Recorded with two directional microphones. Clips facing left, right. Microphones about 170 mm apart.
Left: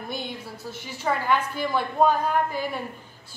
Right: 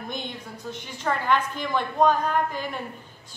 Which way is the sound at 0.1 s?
5° left (ahead or behind).